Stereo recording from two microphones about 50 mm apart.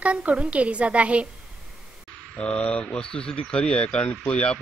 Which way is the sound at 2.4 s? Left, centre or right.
Left.